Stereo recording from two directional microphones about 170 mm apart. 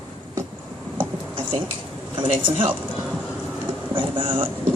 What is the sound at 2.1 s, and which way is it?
Speech, 30° right (ahead or behind).